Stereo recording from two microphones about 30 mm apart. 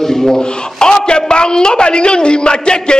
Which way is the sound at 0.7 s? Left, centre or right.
Left.